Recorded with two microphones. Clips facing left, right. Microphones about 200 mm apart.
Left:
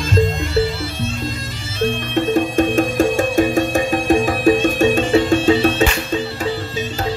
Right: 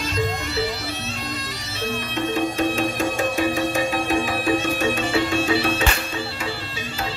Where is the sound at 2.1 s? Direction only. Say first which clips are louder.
Left 7 dB; 50° left (ahead or behind).